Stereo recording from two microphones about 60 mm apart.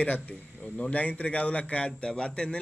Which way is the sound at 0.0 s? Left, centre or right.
Left.